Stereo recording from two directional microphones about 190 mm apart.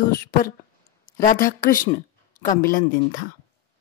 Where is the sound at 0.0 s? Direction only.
50° left (ahead or behind).